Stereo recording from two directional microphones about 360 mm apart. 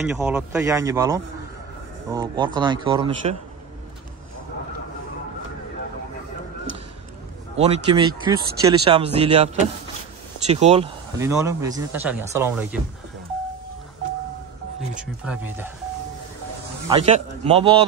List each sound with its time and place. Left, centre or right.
0.1 s speech: centre
7.5 s speech: centre
15.3 s speech: centre
16.9 s speech: centre